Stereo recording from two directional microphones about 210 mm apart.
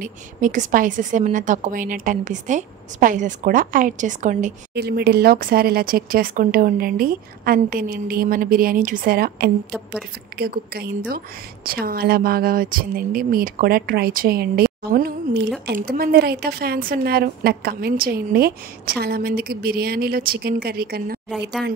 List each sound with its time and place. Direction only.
0.0 s a woman's voice: 40° right (ahead or behind)
4.7 s a woman's voice: 50° right (ahead or behind)